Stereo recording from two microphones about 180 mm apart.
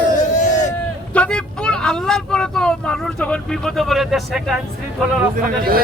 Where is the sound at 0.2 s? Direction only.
40° left (ahead or behind).